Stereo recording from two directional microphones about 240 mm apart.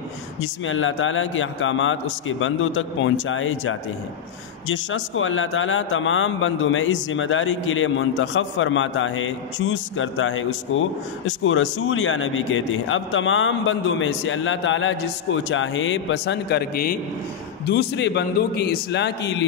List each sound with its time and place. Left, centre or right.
0.4 s a man's voice: left